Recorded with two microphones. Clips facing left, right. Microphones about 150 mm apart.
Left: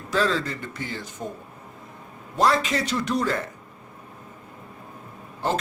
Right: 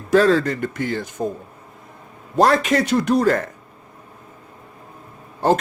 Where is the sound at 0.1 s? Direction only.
60° right (ahead or behind).